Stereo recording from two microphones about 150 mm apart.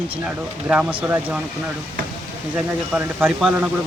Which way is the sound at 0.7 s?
10° right (ahead or behind).